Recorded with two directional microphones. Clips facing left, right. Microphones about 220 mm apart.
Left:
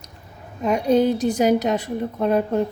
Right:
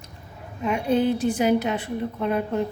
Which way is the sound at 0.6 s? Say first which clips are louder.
Left 4 dB; 40° left (ahead or behind).